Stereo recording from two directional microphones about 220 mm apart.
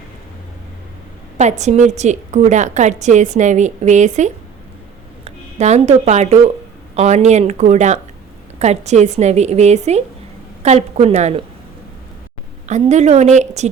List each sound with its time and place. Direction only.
1.4 s a woman's voice: 30° right (ahead or behind)
12.6 s a woman's voice: 30° right (ahead or behind)